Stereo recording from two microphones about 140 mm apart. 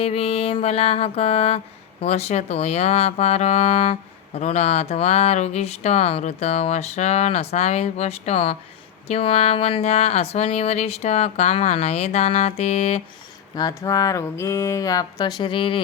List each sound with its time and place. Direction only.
0.0 s speech: 45° left (ahead or behind)
13.6 s speech: 25° left (ahead or behind)